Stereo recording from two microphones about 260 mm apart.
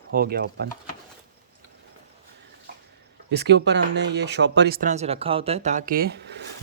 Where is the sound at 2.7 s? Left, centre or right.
Right.